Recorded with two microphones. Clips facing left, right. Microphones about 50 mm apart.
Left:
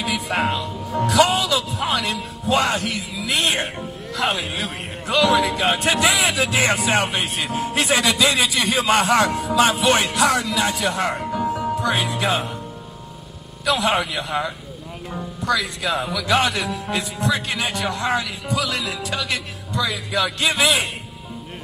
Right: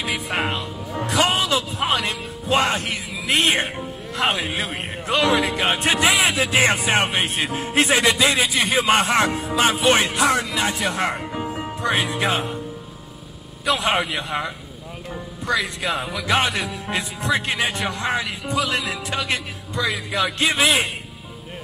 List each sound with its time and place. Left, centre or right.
0.0 s music: centre
1.0 s music: right
2.4 s a man's voice: right
13.7 s a man's voice: right
15.4 s a man's voice: right
16.6 s speech: centre
16.9 s a man's voice: right